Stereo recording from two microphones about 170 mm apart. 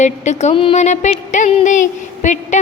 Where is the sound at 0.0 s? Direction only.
40° left (ahead or behind).